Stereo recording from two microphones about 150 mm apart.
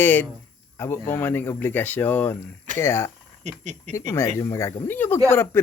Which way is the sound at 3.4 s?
50° right (ahead or behind).